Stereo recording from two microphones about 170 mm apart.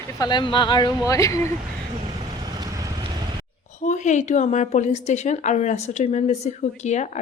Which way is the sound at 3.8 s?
45° left (ahead or behind).